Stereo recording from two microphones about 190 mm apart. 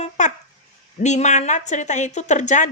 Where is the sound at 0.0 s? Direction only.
40° left (ahead or behind).